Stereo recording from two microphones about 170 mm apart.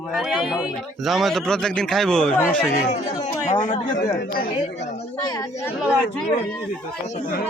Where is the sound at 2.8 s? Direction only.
45° left (ahead or behind).